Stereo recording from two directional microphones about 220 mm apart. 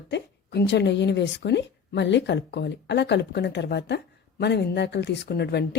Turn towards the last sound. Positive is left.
turn(degrees=50)  # may be behind; listen again after turning